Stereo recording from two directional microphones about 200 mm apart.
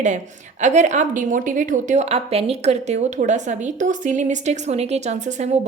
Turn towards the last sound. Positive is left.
turn(degrees=-35)  # may be behind; listen again after turning